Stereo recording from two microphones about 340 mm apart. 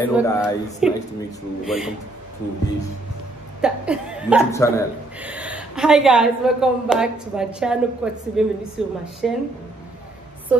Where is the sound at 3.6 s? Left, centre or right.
Centre.